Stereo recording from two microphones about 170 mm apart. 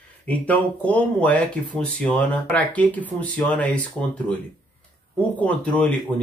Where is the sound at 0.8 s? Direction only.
5° left (ahead or behind).